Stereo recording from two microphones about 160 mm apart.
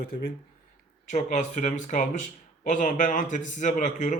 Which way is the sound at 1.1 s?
50° left (ahead or behind).